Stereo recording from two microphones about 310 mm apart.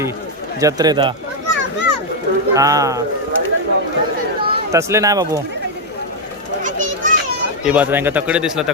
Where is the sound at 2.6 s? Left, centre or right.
Centre.